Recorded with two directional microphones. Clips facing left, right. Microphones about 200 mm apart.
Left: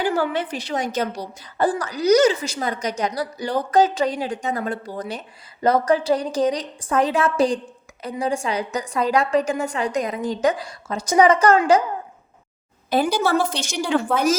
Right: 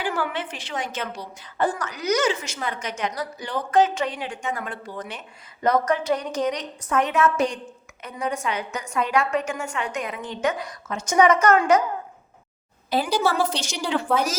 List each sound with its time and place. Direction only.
0.0 s a woman's voice: 40° left (ahead or behind)
12.9 s a woman's voice: 50° left (ahead or behind)